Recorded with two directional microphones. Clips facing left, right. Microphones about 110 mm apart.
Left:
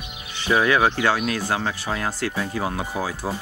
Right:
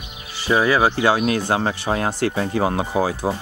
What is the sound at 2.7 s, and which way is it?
Speech, 25° right (ahead or behind).